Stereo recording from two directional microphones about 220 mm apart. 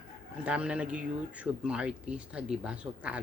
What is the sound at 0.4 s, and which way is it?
Speech, 5° right (ahead or behind).